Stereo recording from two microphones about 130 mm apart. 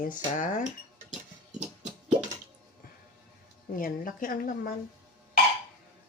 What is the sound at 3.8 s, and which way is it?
Speech, 90° left.